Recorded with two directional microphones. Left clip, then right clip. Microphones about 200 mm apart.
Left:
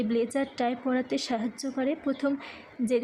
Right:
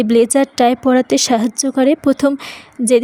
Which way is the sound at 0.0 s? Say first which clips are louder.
Right 16 dB; 50° right (ahead or behind).